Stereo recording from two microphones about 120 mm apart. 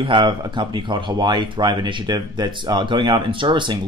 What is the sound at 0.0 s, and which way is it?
Speech, 45° right (ahead or behind).